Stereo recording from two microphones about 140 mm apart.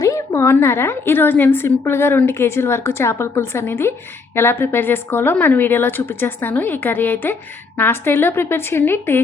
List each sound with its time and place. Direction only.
0.0 s a woman's voice: 20° left (ahead or behind)